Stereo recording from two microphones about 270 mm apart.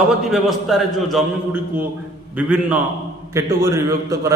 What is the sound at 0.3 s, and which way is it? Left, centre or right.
A man's voice, centre.